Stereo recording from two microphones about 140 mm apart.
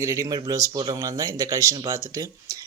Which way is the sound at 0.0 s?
25° right (ahead or behind).